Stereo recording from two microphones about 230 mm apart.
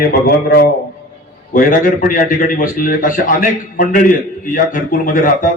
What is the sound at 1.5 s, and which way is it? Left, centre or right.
A man's voice, left.